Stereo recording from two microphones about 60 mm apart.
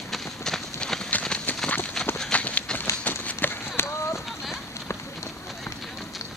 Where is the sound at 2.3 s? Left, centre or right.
Left.